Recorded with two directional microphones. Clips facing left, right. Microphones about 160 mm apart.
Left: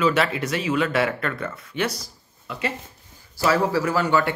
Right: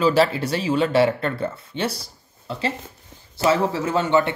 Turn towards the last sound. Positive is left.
turn(degrees=-20)  # may be behind; listen again after turning